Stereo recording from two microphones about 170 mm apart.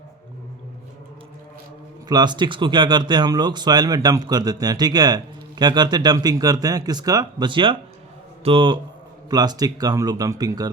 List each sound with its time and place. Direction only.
2.0 s speech: 25° right (ahead or behind)